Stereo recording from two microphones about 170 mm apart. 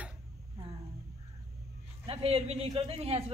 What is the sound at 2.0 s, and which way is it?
Speech, 35° right (ahead or behind).